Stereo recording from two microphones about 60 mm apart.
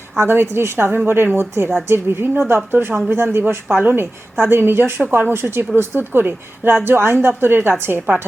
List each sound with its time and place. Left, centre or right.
0.2 s speech: right